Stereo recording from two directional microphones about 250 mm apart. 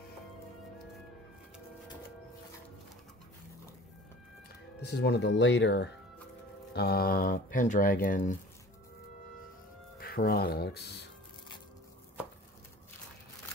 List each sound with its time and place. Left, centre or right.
4.8 s speech: left
9.9 s speech: left